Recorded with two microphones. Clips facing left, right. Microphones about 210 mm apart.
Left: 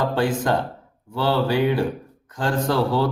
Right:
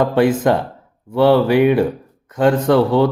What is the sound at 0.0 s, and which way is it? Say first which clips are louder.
A man's voice: right 7 dB; 20° right (ahead or behind).